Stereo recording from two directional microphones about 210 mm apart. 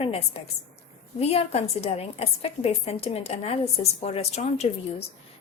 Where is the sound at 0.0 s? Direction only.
30° left (ahead or behind).